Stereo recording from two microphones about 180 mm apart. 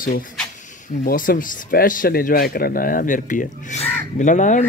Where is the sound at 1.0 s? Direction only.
50° left (ahead or behind).